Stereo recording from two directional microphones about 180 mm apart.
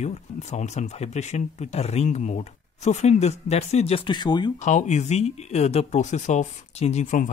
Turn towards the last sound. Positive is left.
turn(degrees=45)  # may be behind; listen again after turning